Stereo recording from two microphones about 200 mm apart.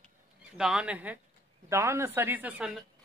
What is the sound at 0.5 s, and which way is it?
Speech, 5° right (ahead or behind).